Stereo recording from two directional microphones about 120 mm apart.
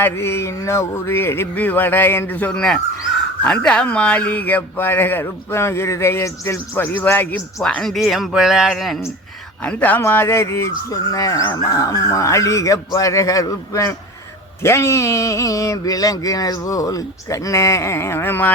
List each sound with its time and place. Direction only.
0.0 s speech: 20° left (ahead or behind); by 9.0 s centre (ahead or behind)
9.6 s speech: 15° left (ahead or behind)